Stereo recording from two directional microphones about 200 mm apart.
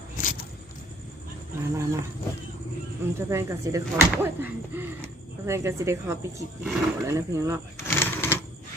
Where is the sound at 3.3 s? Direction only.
15° right (ahead or behind).